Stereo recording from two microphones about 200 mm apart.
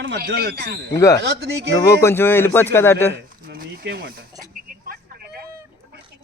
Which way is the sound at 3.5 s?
50° right (ahead or behind).